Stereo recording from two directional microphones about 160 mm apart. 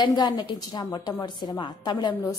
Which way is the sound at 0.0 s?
25° left (ahead or behind).